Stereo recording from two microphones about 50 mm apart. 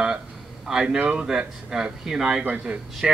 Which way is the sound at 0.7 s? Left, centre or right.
Centre.